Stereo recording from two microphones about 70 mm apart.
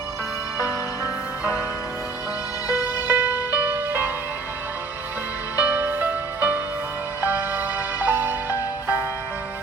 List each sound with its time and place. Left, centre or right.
0.6 s music: left
3.1 s music: right
5.5 s music: right